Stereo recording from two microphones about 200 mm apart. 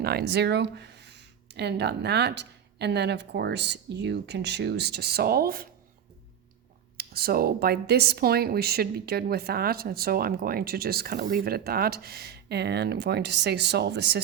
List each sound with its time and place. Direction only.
0.0 s speech: 50° right (ahead or behind)
6.9 s speech: 50° right (ahead or behind)